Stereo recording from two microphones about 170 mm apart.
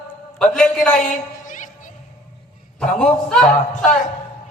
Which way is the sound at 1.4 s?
50° left (ahead or behind).